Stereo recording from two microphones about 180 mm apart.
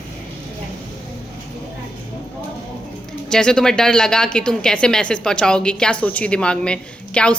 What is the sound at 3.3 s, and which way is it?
A woman's voice, 5° left (ahead or behind).